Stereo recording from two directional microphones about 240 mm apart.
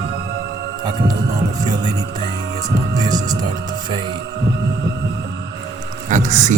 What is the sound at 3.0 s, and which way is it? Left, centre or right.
Music, centre.